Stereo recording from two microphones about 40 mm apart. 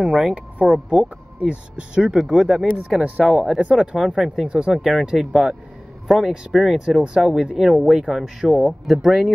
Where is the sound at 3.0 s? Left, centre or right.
Right.